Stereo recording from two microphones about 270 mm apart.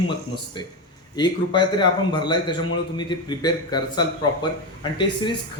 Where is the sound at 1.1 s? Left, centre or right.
Centre.